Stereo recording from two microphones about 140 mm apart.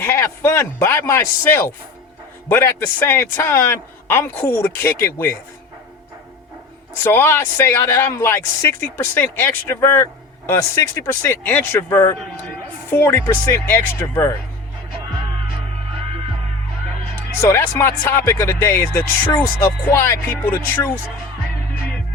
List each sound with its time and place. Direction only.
0.0 s speech: 15° left (ahead or behind)
7.0 s speech: 15° left (ahead or behind)
17.5 s speech: 20° left (ahead or behind)